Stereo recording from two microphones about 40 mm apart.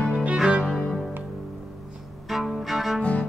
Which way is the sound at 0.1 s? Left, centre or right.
Right.